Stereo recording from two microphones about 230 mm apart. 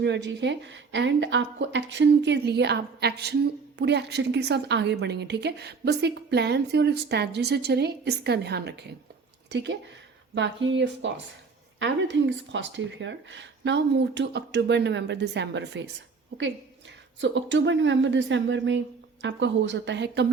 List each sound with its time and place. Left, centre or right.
0.0 s a woman's voice: right
17.2 s a woman's voice: right